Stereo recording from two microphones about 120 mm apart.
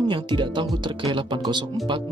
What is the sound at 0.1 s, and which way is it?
Speech, 40° right (ahead or behind).